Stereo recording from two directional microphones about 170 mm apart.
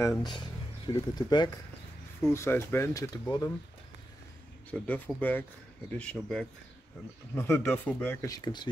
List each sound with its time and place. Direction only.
0.0 s speech: 20° left (ahead or behind)
2.2 s speech: 15° left (ahead or behind)
4.6 s speech: 10° left (ahead or behind)